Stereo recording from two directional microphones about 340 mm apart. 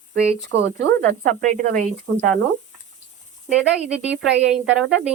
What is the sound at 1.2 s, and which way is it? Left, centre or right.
Speech, right.